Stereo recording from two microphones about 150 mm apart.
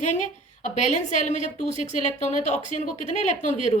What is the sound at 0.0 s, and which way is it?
A woman's voice, 55° left (ahead or behind).